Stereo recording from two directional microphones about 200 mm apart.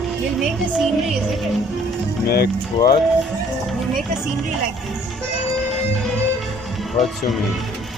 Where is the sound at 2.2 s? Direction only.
50° left (ahead or behind).